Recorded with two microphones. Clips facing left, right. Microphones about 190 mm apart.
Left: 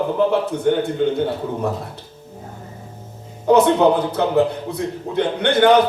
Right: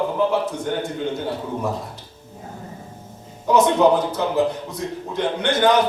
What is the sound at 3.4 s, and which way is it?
A man's voice, 60° left (ahead or behind).